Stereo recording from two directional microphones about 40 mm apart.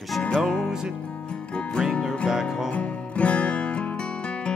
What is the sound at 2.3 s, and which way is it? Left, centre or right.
Music, centre.